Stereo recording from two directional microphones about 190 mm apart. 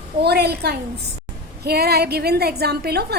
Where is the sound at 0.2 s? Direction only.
60° right (ahead or behind).